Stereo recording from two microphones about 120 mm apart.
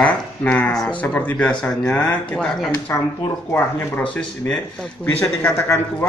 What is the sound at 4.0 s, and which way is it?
Speech, 5° left (ahead or behind).